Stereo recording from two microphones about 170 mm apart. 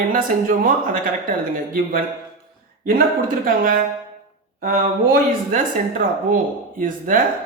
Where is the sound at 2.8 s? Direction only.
60° right (ahead or behind).